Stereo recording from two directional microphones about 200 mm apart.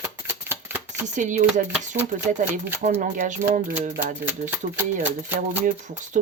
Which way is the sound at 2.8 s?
40° right (ahead or behind).